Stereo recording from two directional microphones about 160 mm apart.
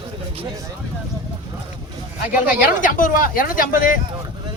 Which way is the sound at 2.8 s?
60° left (ahead or behind).